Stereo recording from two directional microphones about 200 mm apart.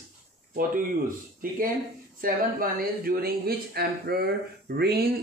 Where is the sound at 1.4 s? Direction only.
45° right (ahead or behind).